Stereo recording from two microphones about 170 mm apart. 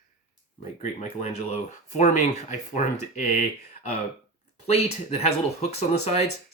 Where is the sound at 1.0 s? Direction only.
40° left (ahead or behind).